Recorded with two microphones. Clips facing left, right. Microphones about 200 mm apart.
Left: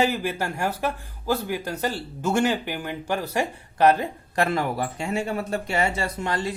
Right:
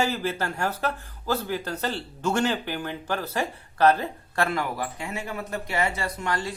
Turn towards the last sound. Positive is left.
turn(degrees=25)  # may be behind; listen again after turning